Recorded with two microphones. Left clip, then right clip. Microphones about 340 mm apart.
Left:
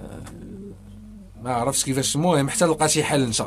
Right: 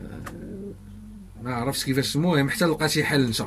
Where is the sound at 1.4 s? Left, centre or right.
Centre.